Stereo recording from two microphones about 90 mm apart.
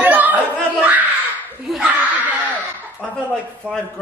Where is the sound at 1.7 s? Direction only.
Centre (ahead or behind).